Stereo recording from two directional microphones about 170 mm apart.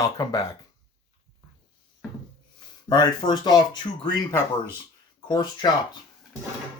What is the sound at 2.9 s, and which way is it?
Speech, 25° left (ahead or behind).